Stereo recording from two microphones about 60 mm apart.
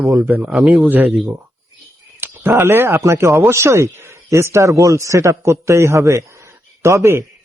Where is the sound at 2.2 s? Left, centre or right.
Right.